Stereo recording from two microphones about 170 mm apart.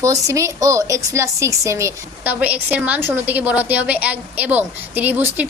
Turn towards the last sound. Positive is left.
turn(degrees=-10)  # may be behind; listen again after turning